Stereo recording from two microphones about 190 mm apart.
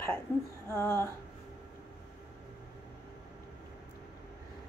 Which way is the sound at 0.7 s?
15° left (ahead or behind).